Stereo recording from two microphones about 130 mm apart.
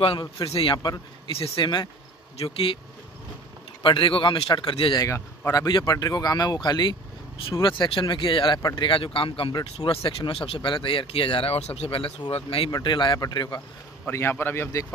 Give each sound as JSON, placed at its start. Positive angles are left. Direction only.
{"t": 0.0, "sound": "a man's voice", "side_deg": 45}
{"t": 3.8, "sound": "a man's voice", "side_deg": 40}
{"t": 5.0, "sound": "a man's voice", "side_deg": 25}
{"t": 14.0, "sound": "a man's voice", "side_deg": 15}